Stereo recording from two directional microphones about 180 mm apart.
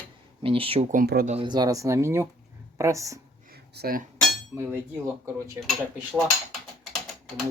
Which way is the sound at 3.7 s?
55° right (ahead or behind).